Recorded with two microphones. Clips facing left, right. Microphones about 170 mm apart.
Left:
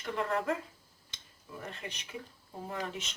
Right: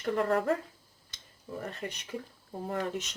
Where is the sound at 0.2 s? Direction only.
40° right (ahead or behind).